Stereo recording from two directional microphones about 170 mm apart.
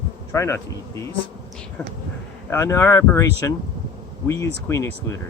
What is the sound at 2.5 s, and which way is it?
Speech, 15° left (ahead or behind).